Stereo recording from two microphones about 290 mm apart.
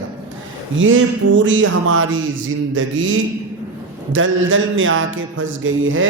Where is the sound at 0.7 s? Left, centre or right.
Right.